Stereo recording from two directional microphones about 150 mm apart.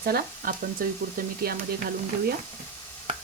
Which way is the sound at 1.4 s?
90° right.